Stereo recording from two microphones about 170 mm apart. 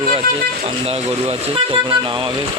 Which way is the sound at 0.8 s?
35° right (ahead or behind).